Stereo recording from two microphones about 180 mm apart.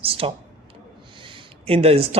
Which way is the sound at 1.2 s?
30° right (ahead or behind).